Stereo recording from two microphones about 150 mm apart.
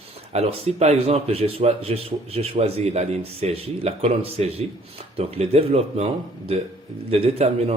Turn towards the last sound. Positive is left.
turn(degrees=-45)  # may be behind; listen again after turning